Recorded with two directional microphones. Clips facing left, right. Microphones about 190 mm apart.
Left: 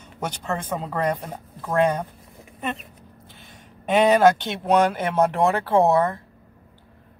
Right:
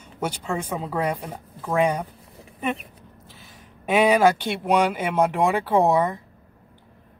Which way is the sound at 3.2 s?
Centre (ahead or behind).